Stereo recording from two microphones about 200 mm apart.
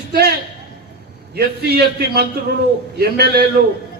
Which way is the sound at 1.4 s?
55° right (ahead or behind).